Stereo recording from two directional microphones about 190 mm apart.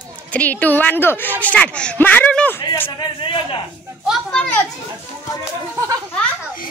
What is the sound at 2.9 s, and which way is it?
Speech, 25° left (ahead or behind).